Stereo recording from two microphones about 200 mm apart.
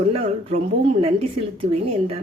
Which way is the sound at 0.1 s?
30° right (ahead or behind).